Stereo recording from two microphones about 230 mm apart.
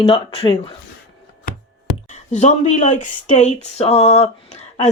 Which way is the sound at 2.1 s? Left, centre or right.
Left.